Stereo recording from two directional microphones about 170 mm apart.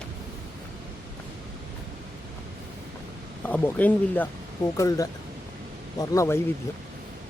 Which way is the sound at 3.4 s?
10° left (ahead or behind).